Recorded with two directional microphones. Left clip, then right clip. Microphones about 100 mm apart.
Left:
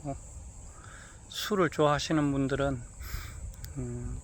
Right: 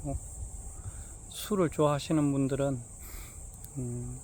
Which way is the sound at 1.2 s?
15° right (ahead or behind).